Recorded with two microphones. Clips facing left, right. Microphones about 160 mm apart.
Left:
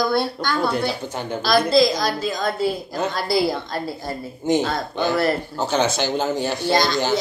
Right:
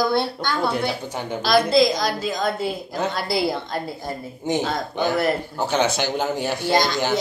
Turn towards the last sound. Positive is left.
turn(degrees=-15)  # may be behind; listen again after turning